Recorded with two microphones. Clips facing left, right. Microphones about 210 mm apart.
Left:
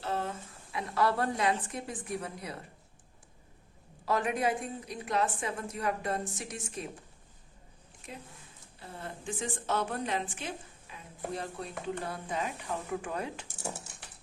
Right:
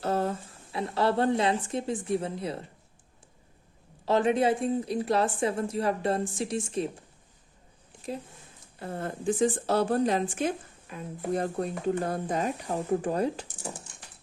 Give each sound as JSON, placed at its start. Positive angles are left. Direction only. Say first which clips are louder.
{"t": 0.0, "sound": "a woman's voice", "louder": "right 7 dB", "side_deg": -40}
{"t": 4.0, "sound": "a woman's voice", "louder": "right 6 dB", "side_deg": -25}
{"t": 8.8, "sound": "a woman's voice", "louder": "right 9 dB", "side_deg": -55}
{"t": 9.2, "sound": "a woman's voice", "louder": "right 11 dB", "side_deg": -35}
{"t": 13.5, "sound": "speech", "louder": "right 1 dB", "side_deg": 10}